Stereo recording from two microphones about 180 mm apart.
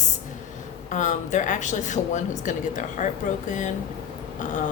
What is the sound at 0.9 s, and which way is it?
Speech, 45° left (ahead or behind).